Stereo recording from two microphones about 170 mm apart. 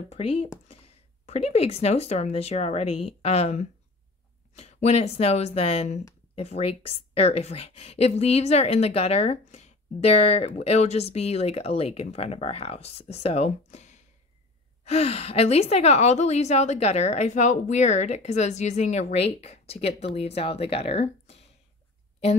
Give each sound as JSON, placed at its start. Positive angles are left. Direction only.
{"t": 0.1, "sound": "a woman's voice", "side_deg": 35}